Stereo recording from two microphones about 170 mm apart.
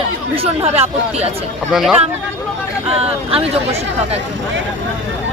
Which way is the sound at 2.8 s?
35° right (ahead or behind).